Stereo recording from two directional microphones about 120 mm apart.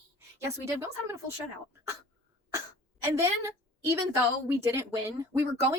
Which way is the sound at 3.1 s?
25° right (ahead or behind).